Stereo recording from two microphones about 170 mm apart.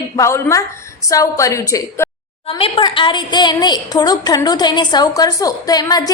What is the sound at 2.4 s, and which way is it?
A woman's voice, 35° left (ahead or behind).